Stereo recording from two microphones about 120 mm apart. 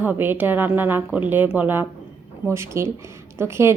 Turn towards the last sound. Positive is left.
turn(degrees=-20)  # may be behind; listen again after turning